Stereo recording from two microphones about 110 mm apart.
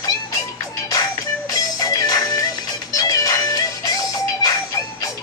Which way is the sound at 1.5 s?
35° left (ahead or behind).